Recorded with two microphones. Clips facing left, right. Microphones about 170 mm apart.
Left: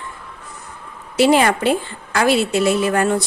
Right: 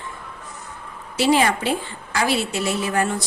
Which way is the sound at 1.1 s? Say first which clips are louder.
Left 4 dB; 60° left (ahead or behind).